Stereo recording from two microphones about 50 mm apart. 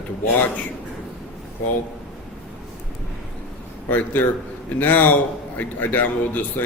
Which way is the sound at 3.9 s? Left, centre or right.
Left.